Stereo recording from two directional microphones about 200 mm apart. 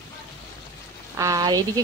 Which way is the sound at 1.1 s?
15° right (ahead or behind).